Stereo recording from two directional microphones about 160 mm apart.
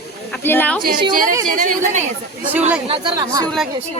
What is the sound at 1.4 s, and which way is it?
Speech, 55° right (ahead or behind).